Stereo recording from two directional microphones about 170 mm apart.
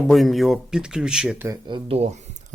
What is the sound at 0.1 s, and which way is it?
Speech, centre (ahead or behind).